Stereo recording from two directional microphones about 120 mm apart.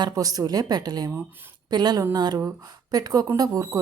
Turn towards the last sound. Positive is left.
turn(degrees=-30)  # may be behind; listen again after turning